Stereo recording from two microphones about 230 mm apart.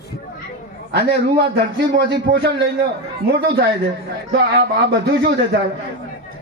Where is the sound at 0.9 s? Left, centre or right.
Right.